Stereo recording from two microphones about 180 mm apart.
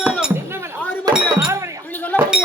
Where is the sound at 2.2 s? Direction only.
5° right (ahead or behind).